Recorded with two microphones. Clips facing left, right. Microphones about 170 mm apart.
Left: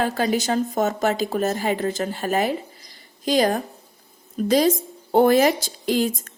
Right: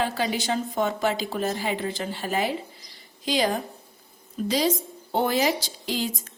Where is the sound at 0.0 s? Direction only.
45° left (ahead or behind).